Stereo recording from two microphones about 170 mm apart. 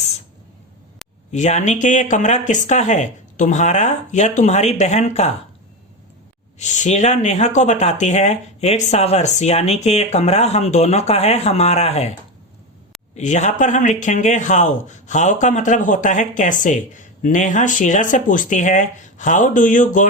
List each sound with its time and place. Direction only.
1.3 s a man's voice: 45° left (ahead or behind)
6.6 s speech: 45° left (ahead or behind)
13.1 s a man's voice: 45° left (ahead or behind)